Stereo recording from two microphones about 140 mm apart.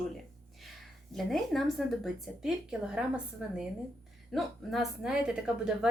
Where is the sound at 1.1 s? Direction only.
Centre (ahead or behind).